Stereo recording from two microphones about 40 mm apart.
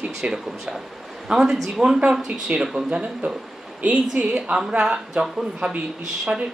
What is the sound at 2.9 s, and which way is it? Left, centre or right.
A woman's voice, right.